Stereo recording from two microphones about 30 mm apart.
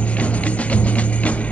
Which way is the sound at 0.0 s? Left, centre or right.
Left.